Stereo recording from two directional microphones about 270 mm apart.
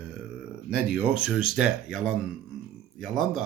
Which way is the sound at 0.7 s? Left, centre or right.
Centre.